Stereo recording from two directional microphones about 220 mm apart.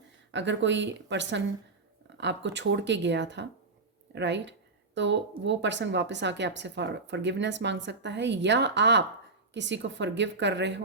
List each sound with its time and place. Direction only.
0.3 s speech: 55° right (ahead or behind)